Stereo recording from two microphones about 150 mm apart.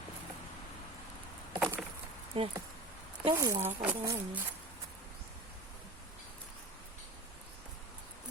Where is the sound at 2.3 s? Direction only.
40° right (ahead or behind).